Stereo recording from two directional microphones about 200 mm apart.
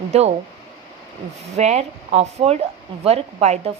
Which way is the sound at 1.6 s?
35° right (ahead or behind).